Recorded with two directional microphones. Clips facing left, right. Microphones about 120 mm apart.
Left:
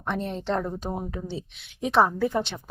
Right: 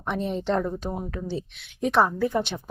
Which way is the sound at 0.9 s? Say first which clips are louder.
Even; 20° left (ahead or behind).